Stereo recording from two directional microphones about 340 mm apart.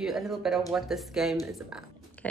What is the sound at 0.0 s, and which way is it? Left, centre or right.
Speech, centre.